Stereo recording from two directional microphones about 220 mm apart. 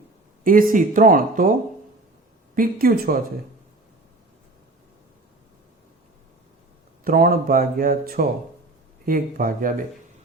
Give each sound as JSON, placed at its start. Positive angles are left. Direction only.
{"t": 0.4, "sound": "speech", "side_deg": -40}
{"t": 2.6, "sound": "speech", "side_deg": -40}
{"t": 7.0, "sound": "speech", "side_deg": -40}